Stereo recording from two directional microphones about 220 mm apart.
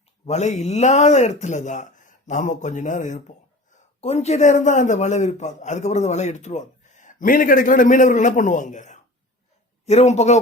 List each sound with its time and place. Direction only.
0.3 s a man's voice: 30° left (ahead or behind)